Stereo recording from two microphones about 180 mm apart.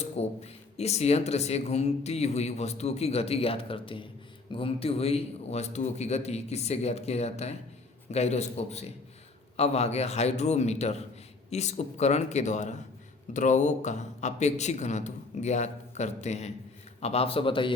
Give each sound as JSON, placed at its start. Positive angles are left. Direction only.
{"t": 0.2, "sound": "speech", "side_deg": 35}